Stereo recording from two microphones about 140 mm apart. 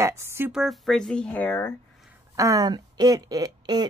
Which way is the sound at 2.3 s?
25° right (ahead or behind).